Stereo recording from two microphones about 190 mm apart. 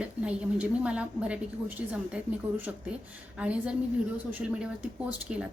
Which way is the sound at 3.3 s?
5° right (ahead or behind).